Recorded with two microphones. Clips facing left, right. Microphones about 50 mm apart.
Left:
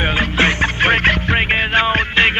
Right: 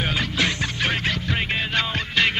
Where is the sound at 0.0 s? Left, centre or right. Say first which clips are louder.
Left 7 dB; left.